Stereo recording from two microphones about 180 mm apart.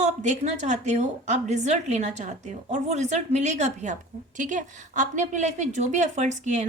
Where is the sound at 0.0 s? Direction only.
40° right (ahead or behind).